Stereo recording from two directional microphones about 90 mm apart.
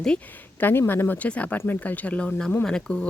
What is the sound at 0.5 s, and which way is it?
Speech, 25° left (ahead or behind).